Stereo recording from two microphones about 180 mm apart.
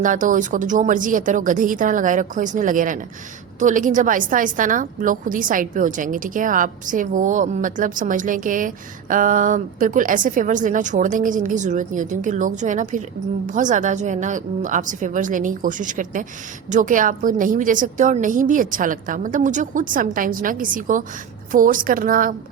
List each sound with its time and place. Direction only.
0.0 s a woman's voice: 45° right (ahead or behind)